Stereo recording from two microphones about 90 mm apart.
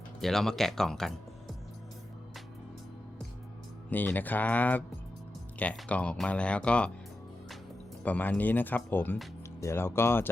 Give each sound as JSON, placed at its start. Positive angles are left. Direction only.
{"t": 0.2, "sound": "speech", "side_deg": 5}
{"t": 3.8, "sound": "speech", "side_deg": 20}
{"t": 5.9, "sound": "speech", "side_deg": 15}
{"t": 8.0, "sound": "speech", "side_deg": 15}